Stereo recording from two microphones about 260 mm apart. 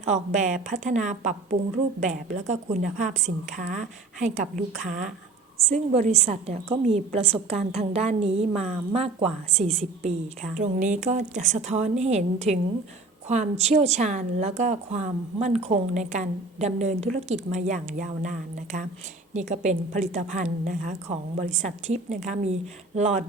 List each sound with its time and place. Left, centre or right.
0.0 s speech: right